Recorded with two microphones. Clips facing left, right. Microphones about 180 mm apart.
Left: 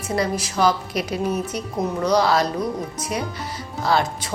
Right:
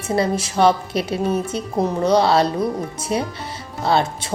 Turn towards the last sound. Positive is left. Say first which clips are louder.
# right 2 dB
turn(degrees=-25)  # may be behind; listen again after turning